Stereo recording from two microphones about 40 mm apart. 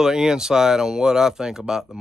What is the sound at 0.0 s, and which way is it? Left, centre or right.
Speech, centre.